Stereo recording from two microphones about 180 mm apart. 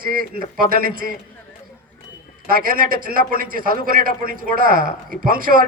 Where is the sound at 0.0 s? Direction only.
50° right (ahead or behind).